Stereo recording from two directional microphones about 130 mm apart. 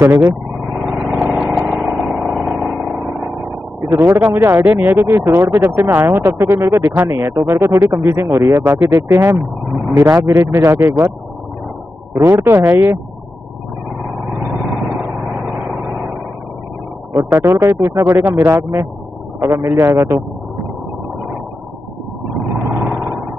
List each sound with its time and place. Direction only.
0.0 s speech: 20° right (ahead or behind)
0.8 s vehicle: centre (ahead or behind)
1.7 s engine: centre (ahead or behind)
2.5 s vehicle: centre (ahead or behind)
3.9 s speech: 25° right (ahead or behind)
12.3 s speech: 20° right (ahead or behind)
14.4 s vehicle: centre (ahead or behind)
17.1 s speech: 20° right (ahead or behind)
22.7 s vehicle: centre (ahead or behind)